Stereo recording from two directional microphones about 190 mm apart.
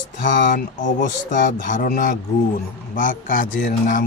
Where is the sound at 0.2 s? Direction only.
45° left (ahead or behind).